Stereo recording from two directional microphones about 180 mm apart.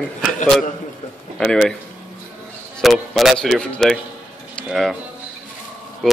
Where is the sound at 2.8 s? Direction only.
Centre (ahead or behind).